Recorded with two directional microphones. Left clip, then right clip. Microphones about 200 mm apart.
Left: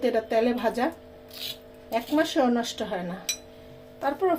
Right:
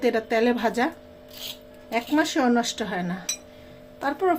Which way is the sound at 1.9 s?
35° right (ahead or behind).